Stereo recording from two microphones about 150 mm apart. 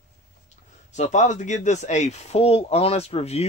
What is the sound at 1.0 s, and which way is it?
Speech, 55° left (ahead or behind).